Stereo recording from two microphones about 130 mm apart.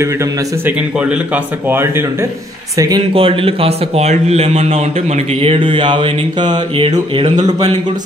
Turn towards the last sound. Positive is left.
turn(degrees=-40)  # may be behind; listen again after turning